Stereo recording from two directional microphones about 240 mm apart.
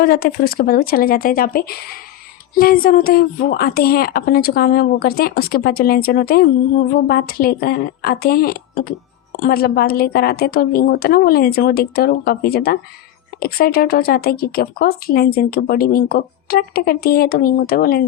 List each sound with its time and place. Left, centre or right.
0.0 s speech: left